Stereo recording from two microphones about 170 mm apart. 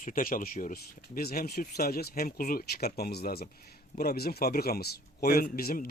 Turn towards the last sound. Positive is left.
turn(degrees=60)  # may be behind; listen again after turning